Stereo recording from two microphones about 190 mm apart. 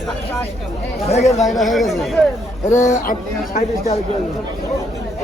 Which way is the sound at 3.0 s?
45° left (ahead or behind).